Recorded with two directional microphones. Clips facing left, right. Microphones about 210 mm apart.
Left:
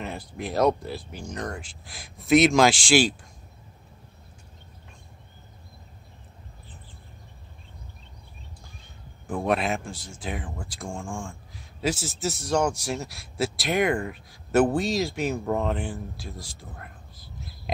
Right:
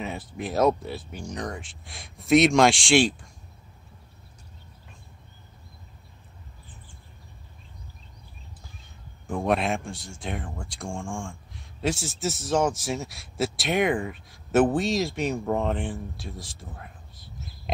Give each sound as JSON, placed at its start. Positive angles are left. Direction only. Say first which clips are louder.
{"t": 0.0, "sound": "speech", "louder": "right 1 dB", "side_deg": 0}
{"t": 9.3, "sound": "speech", "louder": "even", "side_deg": 0}